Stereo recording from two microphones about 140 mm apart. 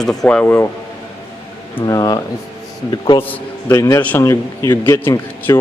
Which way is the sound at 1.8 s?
25° left (ahead or behind).